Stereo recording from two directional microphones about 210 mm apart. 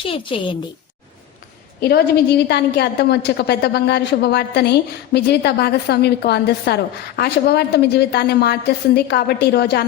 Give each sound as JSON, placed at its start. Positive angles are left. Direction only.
{"t": 0.0, "sound": "a woman's voice", "side_deg": 25}
{"t": 1.8, "sound": "a woman's voice", "side_deg": 50}